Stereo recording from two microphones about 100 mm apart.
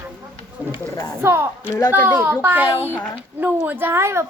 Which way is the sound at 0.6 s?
15° right (ahead or behind).